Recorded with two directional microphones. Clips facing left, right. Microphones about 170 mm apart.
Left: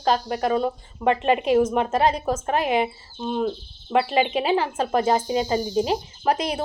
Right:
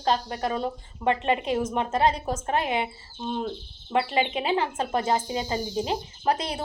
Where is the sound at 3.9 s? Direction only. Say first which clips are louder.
Left 4 dB; 25° left (ahead or behind).